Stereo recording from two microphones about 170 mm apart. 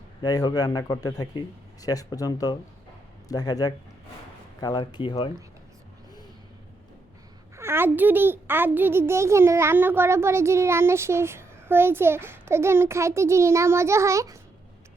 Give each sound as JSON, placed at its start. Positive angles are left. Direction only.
{"t": 0.2, "sound": "a man's voice", "side_deg": 25}
{"t": 7.5, "sound": "a child's voice", "side_deg": -15}